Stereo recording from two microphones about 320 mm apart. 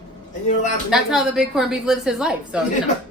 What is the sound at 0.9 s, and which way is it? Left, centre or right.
A woman's voice, centre.